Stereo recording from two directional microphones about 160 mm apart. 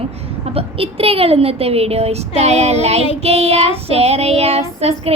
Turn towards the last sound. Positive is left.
turn(degrees=-40)  # may be behind; listen again after turning